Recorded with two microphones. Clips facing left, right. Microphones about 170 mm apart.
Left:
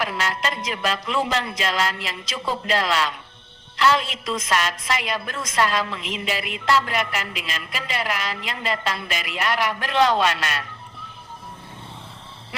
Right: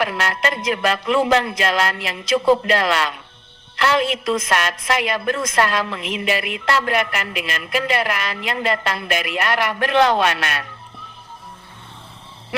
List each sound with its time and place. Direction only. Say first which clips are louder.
0.0 s a woman's voice: right 4 dB; 60° right (ahead or behind)